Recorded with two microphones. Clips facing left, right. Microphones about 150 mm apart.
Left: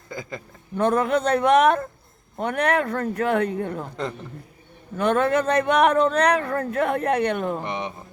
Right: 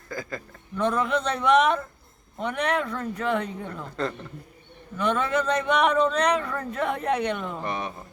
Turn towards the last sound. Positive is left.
turn(degrees=20)  # may be behind; listen again after turning